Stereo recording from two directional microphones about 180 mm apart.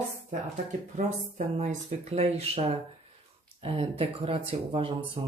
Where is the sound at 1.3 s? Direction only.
45° right (ahead or behind).